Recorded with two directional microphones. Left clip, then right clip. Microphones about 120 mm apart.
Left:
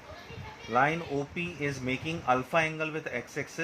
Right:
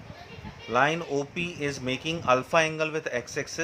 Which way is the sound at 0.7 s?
45° right (ahead or behind).